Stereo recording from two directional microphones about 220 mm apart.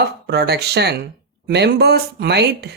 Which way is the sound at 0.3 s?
50° right (ahead or behind).